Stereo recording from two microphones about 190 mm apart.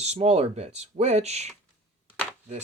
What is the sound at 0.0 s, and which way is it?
Speech, 35° right (ahead or behind).